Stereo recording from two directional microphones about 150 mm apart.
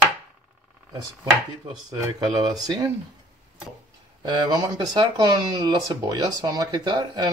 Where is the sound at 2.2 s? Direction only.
25° right (ahead or behind).